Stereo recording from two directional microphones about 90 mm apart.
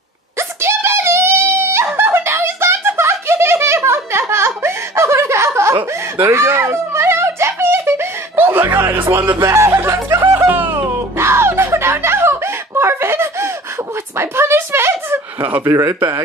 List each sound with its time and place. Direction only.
0.4 s wail: 30° right (ahead or behind)
2.0 s giggle: 25° right (ahead or behind)
6.2 s whimper: 30° right (ahead or behind)
11.1 s a sound: 30° right (ahead or behind)
15.6 s speech: 35° right (ahead or behind)